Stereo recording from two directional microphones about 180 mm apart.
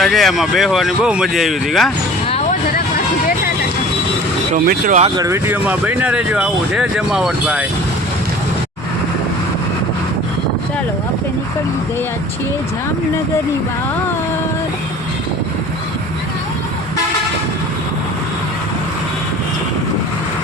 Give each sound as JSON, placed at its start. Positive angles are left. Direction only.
{"t": 0.0, "sound": "speech", "side_deg": 0}
{"t": 4.5, "sound": "speech", "side_deg": -50}
{"t": 5.1, "sound": "speech", "side_deg": -15}